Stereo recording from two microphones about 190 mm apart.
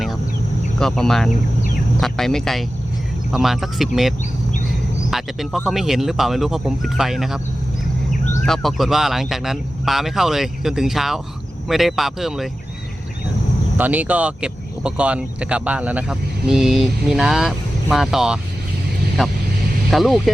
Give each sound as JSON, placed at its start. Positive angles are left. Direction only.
{"t": 0.8, "sound": "speech", "side_deg": 5}
{"t": 5.1, "sound": "speech", "side_deg": 0}
{"t": 8.4, "sound": "speech", "side_deg": 0}
{"t": 13.7, "sound": "speech", "side_deg": -10}